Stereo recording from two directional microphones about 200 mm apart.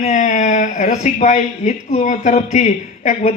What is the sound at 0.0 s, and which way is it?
Speech, 35° left (ahead or behind).